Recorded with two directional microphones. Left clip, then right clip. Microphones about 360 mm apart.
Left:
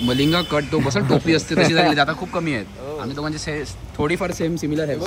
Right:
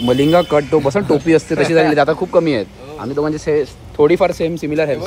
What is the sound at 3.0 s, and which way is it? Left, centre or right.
Speech, right.